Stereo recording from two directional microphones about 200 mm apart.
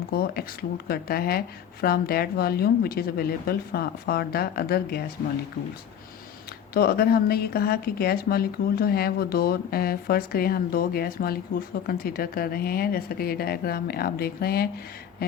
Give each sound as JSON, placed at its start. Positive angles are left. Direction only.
{"t": 0.1, "sound": "speech", "side_deg": 50}
{"t": 6.7, "sound": "speech", "side_deg": 50}